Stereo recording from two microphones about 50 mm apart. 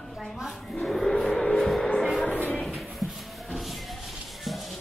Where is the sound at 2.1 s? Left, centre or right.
Centre.